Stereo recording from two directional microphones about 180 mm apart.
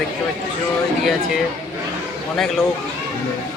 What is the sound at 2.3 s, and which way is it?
Speech, centre (ahead or behind).